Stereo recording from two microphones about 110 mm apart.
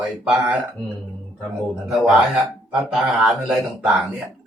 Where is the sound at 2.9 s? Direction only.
5° right (ahead or behind).